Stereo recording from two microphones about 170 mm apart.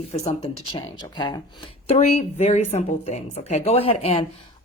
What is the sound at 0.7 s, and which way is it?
Speech, 25° left (ahead or behind).